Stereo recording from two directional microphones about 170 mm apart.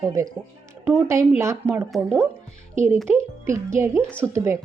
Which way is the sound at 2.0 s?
10° right (ahead or behind).